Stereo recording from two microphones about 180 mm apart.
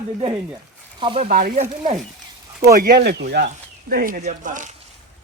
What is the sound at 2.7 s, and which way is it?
Speech, 55° right (ahead or behind).